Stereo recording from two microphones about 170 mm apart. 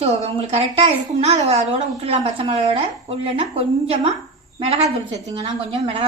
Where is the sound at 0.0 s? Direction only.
40° right (ahead or behind).